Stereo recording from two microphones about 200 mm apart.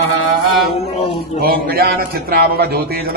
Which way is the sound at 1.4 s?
50° right (ahead or behind).